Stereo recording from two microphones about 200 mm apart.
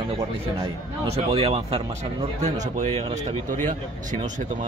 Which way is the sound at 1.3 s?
30° right (ahead or behind).